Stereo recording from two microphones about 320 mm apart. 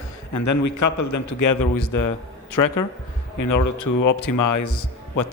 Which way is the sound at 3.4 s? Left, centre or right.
Left.